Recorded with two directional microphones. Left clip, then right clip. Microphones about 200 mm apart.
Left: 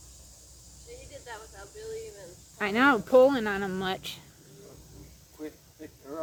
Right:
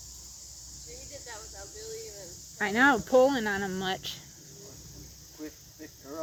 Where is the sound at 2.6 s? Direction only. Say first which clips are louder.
Even; 5° right (ahead or behind).